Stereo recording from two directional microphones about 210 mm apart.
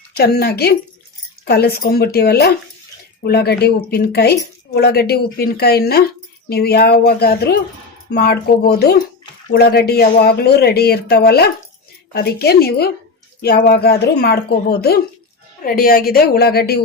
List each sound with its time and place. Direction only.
0.2 s speech: 45° left (ahead or behind)